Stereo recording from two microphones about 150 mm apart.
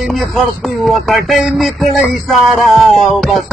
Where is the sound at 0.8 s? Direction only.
Centre (ahead or behind).